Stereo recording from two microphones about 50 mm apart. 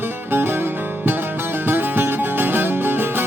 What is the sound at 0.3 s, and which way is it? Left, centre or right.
Music, right.